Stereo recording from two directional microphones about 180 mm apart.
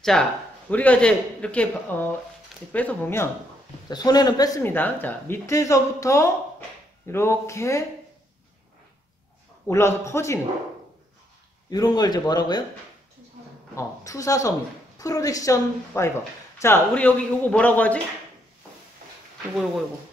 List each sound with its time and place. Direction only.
0.0 s speech: 5° left (ahead or behind)
3.9 s speech: 20° left (ahead or behind)
9.7 s speech: 15° left (ahead or behind)
11.7 s a woman's voice: 20° left (ahead or behind)
13.7 s a woman's voice: 15° left (ahead or behind)